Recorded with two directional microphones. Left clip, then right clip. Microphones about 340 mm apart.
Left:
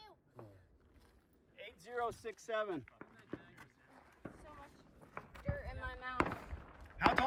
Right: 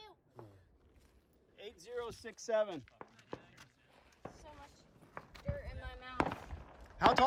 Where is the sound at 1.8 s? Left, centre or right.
Centre.